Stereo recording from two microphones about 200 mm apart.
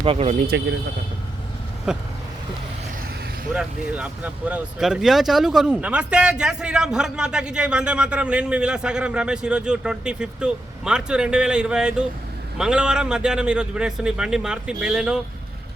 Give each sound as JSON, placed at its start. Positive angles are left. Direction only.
{"t": 0.0, "sound": "speech", "side_deg": -30}
{"t": 0.3, "sound": "speech", "side_deg": -55}
{"t": 1.9, "sound": "speech", "side_deg": -5}
{"t": 3.5, "sound": "speech", "side_deg": -5}